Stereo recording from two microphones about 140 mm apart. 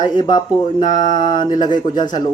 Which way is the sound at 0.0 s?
30° left (ahead or behind).